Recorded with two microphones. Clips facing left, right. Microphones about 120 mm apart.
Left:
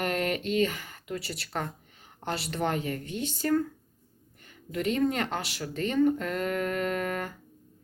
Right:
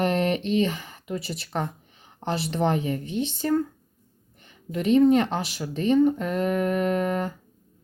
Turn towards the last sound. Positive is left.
turn(degrees=-20)  # may be behind; listen again after turning